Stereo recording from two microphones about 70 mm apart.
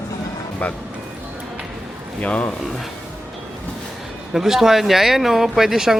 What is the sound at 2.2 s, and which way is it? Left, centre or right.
Speech, left.